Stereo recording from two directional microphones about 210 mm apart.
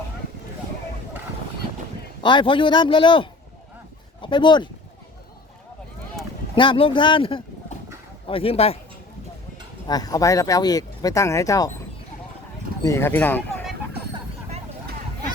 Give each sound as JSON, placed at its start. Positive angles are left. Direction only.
{"t": 2.2, "sound": "a man's voice", "side_deg": 25}
{"t": 6.6, "sound": "a man's voice", "side_deg": 25}
{"t": 9.8, "sound": "speech", "side_deg": 20}
{"t": 12.8, "sound": "speech", "side_deg": 10}